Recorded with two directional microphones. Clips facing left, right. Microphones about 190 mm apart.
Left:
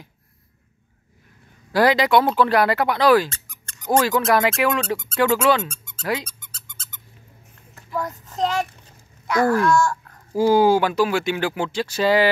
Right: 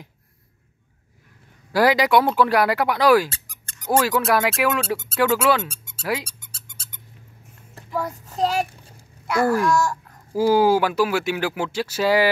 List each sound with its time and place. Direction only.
1.7 s speech: 10° right (ahead or behind)
5.7 s squeak: 10° right (ahead or behind)
7.9 s child singing: 10° right (ahead or behind)
9.3 s speech: 10° right (ahead or behind)